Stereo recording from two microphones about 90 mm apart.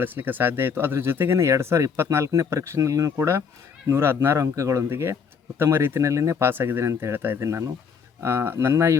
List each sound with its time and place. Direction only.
0.0 s speech: 25° right (ahead or behind)
7.4 s speech: 35° right (ahead or behind)